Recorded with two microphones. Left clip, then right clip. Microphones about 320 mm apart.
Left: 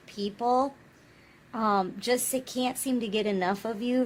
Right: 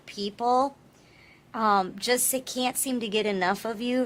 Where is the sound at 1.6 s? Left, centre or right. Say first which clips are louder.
Right 3 dB; left.